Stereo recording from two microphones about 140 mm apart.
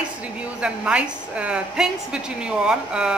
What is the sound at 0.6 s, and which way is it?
A woman's voice, 5° right (ahead or behind).